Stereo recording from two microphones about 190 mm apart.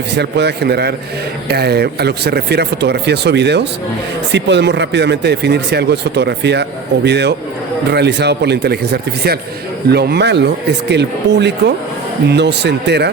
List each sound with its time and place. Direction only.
0.1 s speech: 60° right (ahead or behind)